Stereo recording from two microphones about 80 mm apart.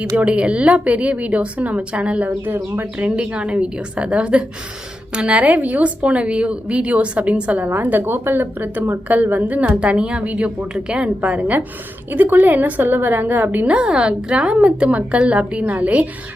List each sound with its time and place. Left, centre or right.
0.2 s a woman's voice: centre